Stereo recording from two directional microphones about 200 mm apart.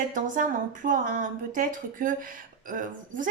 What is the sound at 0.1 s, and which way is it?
A woman's voice, 40° right (ahead or behind).